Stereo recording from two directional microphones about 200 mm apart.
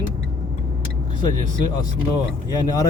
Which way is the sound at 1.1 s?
20° left (ahead or behind).